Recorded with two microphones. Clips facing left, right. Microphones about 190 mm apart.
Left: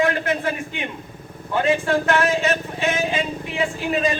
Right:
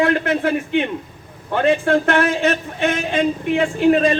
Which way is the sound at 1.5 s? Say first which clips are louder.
Right 3 dB; 55° right (ahead or behind).